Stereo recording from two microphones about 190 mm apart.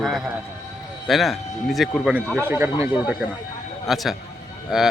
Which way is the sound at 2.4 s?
10° right (ahead or behind).